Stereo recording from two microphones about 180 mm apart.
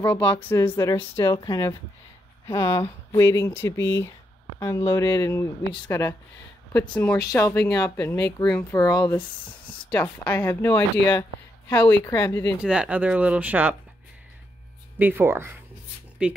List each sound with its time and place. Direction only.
0.0 s speech: 10° left (ahead or behind)
7.2 s speech: 20° left (ahead or behind)
8.8 s speech: 25° left (ahead or behind)
9.7 s speech: 10° left (ahead or behind)
12.6 s speech: 5° right (ahead or behind)
15.0 s speech: 10° right (ahead or behind)